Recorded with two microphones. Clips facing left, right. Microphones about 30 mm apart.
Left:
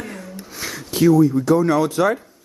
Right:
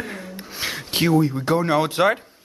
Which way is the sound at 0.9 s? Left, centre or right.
Right.